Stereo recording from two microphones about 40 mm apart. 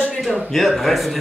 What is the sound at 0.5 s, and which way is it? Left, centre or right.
Speech, centre.